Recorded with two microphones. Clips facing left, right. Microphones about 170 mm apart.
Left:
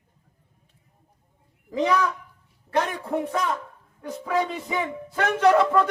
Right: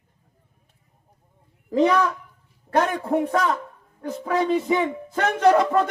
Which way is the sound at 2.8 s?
40° right (ahead or behind).